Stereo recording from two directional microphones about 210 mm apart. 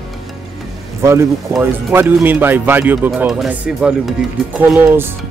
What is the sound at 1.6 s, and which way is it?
Speech, 10° right (ahead or behind).